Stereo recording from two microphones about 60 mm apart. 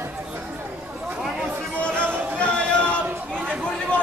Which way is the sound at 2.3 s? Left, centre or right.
Centre.